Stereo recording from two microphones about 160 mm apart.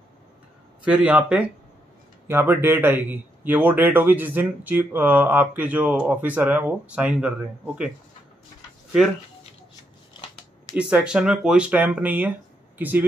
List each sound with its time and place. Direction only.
0.8 s speech: 10° right (ahead or behind)
10.8 s speech: 5° right (ahead or behind)